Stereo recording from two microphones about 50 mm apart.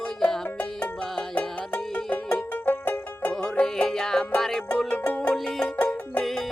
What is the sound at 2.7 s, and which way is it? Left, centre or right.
Music, left.